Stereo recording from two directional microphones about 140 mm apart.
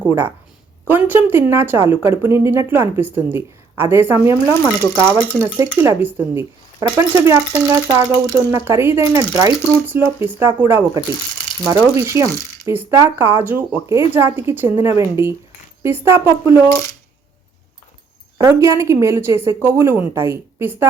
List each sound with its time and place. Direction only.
0.0 s a woman's voice: 15° right (ahead or behind)
18.3 s a woman's voice: 20° right (ahead or behind)